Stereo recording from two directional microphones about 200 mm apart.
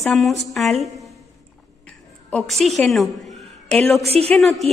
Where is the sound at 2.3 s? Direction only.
Centre (ahead or behind).